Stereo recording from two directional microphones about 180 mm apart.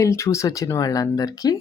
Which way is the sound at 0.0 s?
15° left (ahead or behind).